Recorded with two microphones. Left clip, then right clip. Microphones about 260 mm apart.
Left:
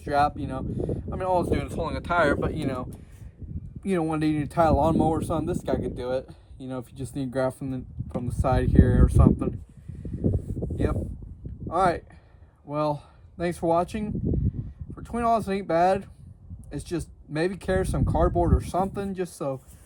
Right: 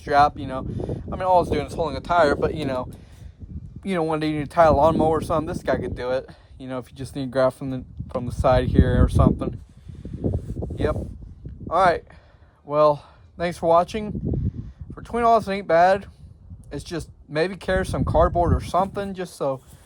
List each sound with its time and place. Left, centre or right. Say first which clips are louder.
0.0 s speech: right 6 dB; right
3.8 s speech: right 2 dB; centre
10.2 s a sound: right 1 dB; centre
11.7 s speech: right 5 dB; right
14.3 s a sound: right 1 dB; centre
14.9 s speech: right 6 dB; right